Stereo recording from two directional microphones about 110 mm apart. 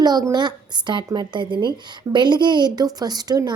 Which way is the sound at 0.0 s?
35° right (ahead or behind).